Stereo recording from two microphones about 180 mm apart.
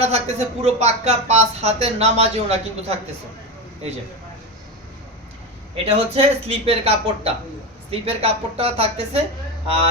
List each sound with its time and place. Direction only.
0.0 s speech: 35° right (ahead or behind)
5.7 s speech: 30° right (ahead or behind)